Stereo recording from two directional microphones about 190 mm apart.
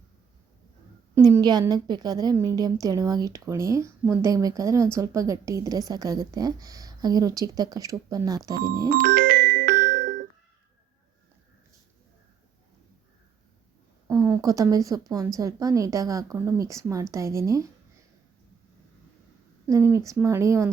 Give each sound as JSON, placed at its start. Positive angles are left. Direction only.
{"t": 1.1, "sound": "a woman's voice", "side_deg": -15}
{"t": 8.9, "sound": "music", "side_deg": -50}
{"t": 14.1, "sound": "speech", "side_deg": -15}
{"t": 19.6, "sound": "speech", "side_deg": -15}